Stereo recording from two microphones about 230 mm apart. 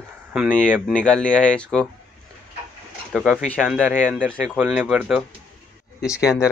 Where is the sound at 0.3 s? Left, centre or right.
Centre.